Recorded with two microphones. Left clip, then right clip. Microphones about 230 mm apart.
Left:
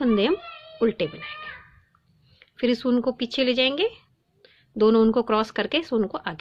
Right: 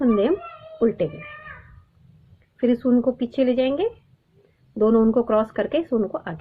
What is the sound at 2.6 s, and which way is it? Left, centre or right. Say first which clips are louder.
A woman's voice: right 3 dB; left.